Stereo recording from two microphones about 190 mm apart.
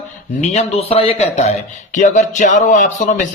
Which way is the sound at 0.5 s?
30° left (ahead or behind).